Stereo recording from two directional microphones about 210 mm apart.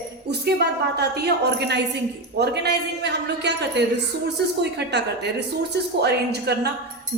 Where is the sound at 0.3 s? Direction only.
50° right (ahead or behind).